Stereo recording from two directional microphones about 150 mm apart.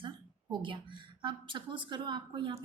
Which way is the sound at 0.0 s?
30° right (ahead or behind).